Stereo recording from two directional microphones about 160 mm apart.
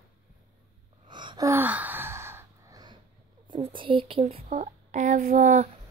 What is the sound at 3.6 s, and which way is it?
Speech, 30° right (ahead or behind).